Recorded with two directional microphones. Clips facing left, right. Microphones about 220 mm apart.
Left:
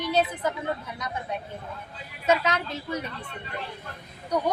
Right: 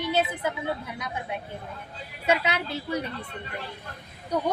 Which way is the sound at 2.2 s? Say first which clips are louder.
Left 1 dB; 10° right (ahead or behind).